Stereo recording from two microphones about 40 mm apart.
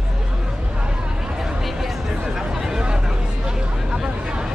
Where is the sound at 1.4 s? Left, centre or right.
Centre.